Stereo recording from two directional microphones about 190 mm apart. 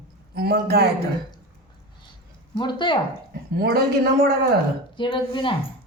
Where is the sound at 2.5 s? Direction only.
25° left (ahead or behind).